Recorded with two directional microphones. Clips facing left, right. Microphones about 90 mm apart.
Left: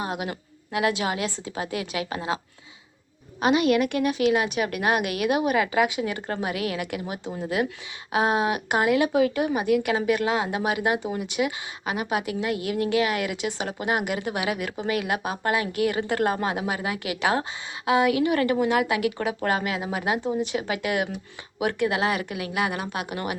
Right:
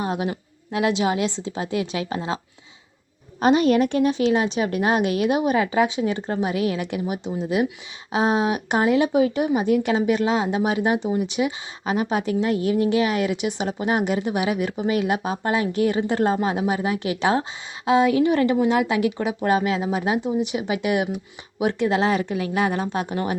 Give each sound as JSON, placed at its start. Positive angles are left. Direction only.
{"t": 0.1, "sound": "a woman's voice", "side_deg": -30}
{"t": 3.4, "sound": "a woman's voice", "side_deg": -35}